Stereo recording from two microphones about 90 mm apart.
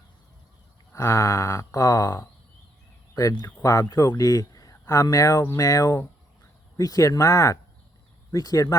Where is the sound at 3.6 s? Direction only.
40° left (ahead or behind).